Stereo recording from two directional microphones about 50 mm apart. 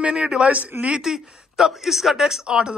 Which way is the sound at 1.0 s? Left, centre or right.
Centre.